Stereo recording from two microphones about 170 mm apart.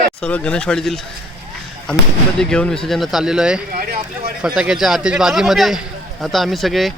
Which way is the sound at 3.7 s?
60° right (ahead or behind).